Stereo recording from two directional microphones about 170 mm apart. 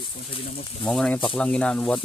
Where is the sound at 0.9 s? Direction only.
5° left (ahead or behind).